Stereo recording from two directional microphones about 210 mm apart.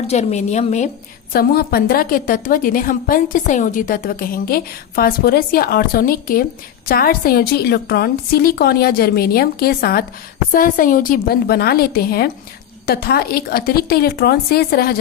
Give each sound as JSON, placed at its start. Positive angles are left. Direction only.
{"t": 0.1, "sound": "a woman's voice", "side_deg": 30}
{"t": 1.3, "sound": "a woman's voice", "side_deg": 45}